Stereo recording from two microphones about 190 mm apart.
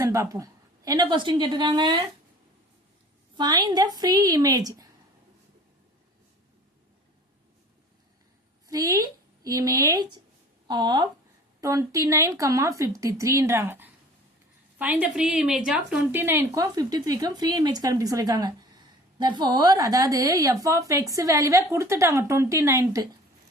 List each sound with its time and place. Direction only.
0.0 s a woman's voice: 15° right (ahead or behind)
3.3 s a woman's voice: 20° right (ahead or behind)
8.6 s a woman's voice: 20° right (ahead or behind)